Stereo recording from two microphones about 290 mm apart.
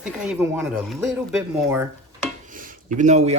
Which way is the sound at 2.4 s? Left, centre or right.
Right.